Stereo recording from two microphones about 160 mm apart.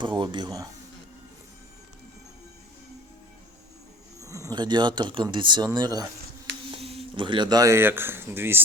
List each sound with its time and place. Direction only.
0.0 s speech: 30° right (ahead or behind)
4.2 s speech: 20° right (ahead or behind)
6.7 s speech: 35° right (ahead or behind); by 8.6 s 15° right (ahead or behind)